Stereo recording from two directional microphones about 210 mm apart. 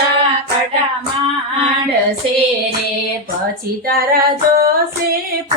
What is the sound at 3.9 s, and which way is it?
Female singing, 45° right (ahead or behind).